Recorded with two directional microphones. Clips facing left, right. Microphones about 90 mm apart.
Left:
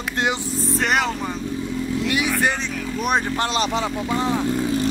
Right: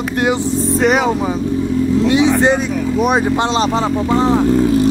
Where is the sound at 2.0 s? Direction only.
25° right (ahead or behind).